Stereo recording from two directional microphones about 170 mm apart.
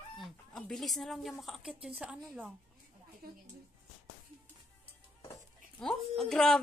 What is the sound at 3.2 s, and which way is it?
Speech, 65° right (ahead or behind).